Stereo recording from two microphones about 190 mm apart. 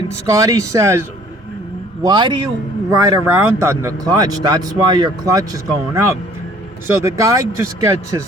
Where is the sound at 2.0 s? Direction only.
25° right (ahead or behind).